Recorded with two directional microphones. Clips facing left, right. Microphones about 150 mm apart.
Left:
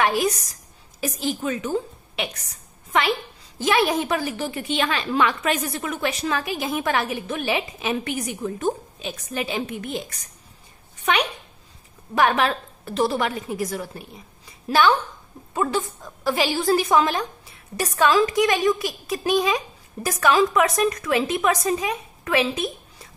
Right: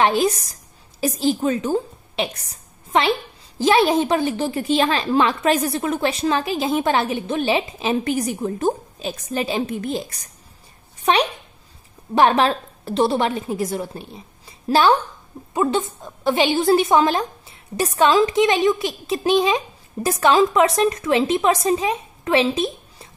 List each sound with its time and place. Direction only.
0.0 s a woman's voice: 25° right (ahead or behind)
15.5 s a woman's voice: 20° right (ahead or behind)